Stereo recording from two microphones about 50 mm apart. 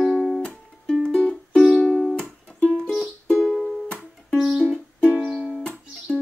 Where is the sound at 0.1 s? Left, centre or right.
Centre.